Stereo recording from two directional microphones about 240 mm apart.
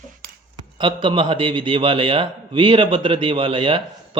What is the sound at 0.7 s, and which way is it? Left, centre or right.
A man's voice, right.